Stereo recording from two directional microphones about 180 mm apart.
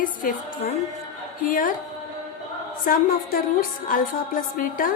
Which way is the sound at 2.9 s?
50° left (ahead or behind).